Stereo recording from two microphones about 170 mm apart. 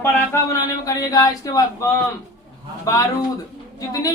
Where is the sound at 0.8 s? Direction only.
20° left (ahead or behind).